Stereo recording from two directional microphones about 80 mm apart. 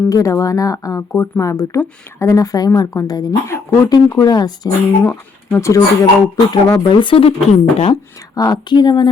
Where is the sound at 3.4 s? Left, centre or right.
Left.